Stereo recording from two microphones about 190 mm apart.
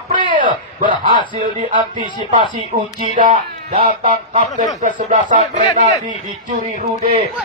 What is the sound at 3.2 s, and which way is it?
Speech, 45° right (ahead or behind).